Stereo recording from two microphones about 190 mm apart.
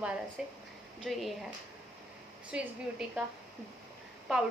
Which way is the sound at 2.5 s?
5° right (ahead or behind).